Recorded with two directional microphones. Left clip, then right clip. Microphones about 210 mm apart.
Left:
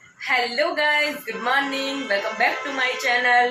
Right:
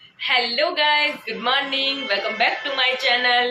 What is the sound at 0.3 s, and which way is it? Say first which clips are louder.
A woman's voice: right 1 dB; 10° right (ahead or behind).